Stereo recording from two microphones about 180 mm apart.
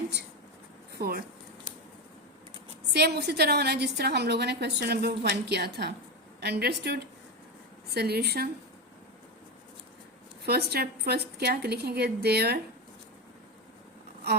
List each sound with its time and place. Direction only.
0.9 s speech: 60° right (ahead or behind)
2.9 s a woman's voice: 65° right (ahead or behind)
10.4 s a woman's voice: 60° right (ahead or behind)